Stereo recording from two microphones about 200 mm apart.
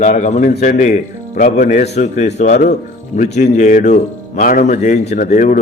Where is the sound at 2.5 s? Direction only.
45° left (ahead or behind).